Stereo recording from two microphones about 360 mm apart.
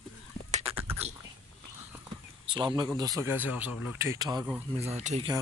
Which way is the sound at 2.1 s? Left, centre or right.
Centre.